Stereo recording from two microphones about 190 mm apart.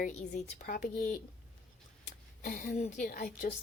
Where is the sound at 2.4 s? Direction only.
45° left (ahead or behind).